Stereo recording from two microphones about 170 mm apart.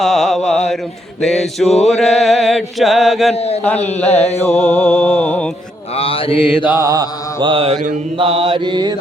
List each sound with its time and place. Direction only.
0.0 s mantra: centre (ahead or behind)
1.6 s a man's voice: 40° left (ahead or behind)
1.9 s chant: centre (ahead or behind)
3.3 s a man's voice: 35° left (ahead or behind)
3.8 s music: 10° left (ahead or behind)
6.0 s mantra: 35° left (ahead or behind)
6.7 s mantra: 15° right (ahead or behind)
7.3 s mantra: 30° right (ahead or behind)